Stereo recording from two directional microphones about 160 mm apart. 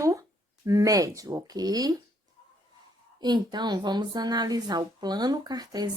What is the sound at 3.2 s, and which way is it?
Speech, 25° right (ahead or behind).